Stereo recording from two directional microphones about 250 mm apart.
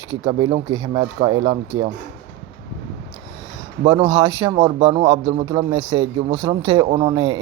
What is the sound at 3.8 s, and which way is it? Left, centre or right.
Speech, centre.